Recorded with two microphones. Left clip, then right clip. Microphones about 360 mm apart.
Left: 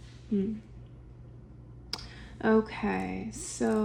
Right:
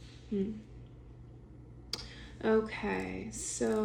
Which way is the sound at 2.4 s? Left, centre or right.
Centre.